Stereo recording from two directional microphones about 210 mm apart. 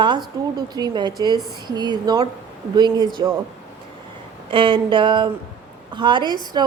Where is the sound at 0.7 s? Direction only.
20° right (ahead or behind).